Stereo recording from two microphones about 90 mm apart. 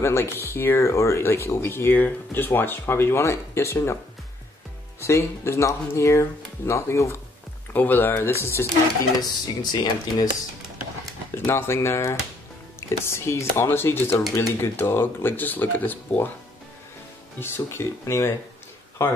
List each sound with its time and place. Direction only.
0.0 s speech: 30° left (ahead or behind)
5.0 s speech: 30° left (ahead or behind)
7.7 s speech: 20° left (ahead or behind)
9.2 s speech: 50° left (ahead or behind)
11.3 s speech: 30° left (ahead or behind)
17.4 s speech: 30° left (ahead or behind)